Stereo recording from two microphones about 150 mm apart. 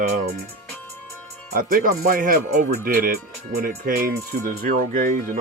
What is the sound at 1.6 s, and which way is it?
Speech, 65° right (ahead or behind).